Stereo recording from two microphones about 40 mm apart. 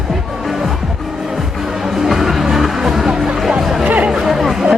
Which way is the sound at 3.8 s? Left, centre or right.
Right.